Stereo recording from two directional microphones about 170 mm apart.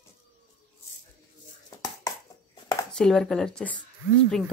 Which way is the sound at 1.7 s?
20° left (ahead or behind).